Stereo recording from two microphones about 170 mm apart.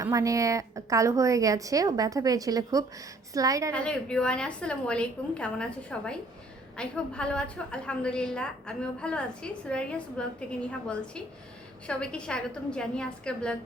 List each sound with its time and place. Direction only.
0.0 s a woman's voice: 20° right (ahead or behind)
3.7 s a woman's voice: 5° left (ahead or behind)